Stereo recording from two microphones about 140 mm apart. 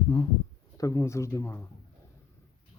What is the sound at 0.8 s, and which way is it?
Speech, 20° left (ahead or behind).